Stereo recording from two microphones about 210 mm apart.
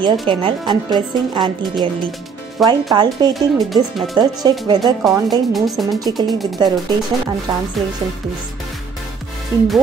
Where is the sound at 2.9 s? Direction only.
20° right (ahead or behind).